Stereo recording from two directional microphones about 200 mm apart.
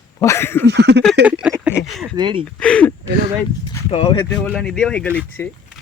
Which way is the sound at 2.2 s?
25° right (ahead or behind).